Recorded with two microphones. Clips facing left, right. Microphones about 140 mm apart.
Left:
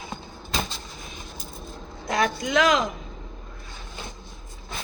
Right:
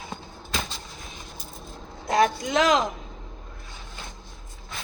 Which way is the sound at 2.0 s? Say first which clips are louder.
Right 3 dB; 35° right (ahead or behind).